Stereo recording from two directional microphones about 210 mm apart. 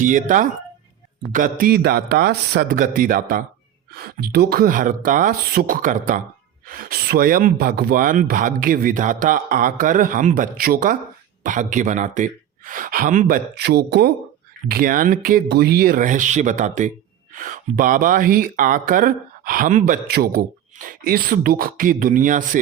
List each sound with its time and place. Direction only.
0.0 s speech: 40° right (ahead or behind)